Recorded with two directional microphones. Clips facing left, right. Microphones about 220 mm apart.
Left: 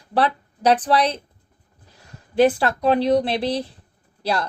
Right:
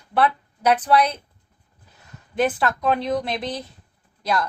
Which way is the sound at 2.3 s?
30° left (ahead or behind).